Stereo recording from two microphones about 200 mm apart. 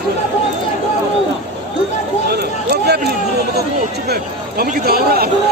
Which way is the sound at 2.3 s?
55° right (ahead or behind).